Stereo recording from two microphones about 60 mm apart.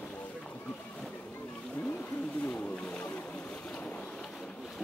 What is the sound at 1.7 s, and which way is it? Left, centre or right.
Wild animals, left.